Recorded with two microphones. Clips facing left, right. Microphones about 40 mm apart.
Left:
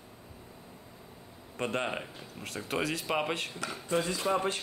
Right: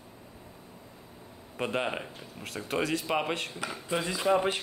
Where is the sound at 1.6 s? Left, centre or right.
Centre.